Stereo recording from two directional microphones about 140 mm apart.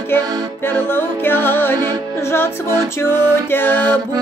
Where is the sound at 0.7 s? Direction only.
15° left (ahead or behind).